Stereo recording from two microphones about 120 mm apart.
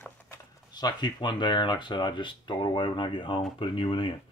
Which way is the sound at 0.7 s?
35° left (ahead or behind).